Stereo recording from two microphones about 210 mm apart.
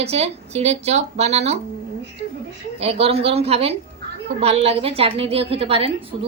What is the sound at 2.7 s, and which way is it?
A woman's voice, 30° right (ahead or behind).